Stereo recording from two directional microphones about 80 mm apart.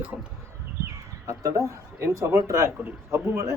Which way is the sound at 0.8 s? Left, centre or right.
Right.